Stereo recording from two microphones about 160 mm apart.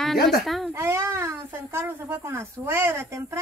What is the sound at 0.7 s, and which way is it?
Speech, 15° right (ahead or behind).